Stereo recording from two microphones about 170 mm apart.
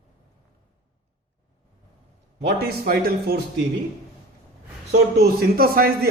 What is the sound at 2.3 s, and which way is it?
A man's voice, 65° right (ahead or behind).